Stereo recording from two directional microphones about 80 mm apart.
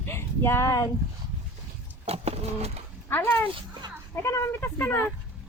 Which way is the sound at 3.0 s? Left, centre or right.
Left.